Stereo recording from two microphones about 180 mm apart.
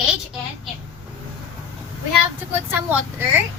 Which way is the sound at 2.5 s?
10° right (ahead or behind).